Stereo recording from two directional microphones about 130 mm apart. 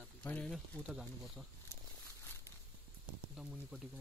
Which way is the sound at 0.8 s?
5° right (ahead or behind).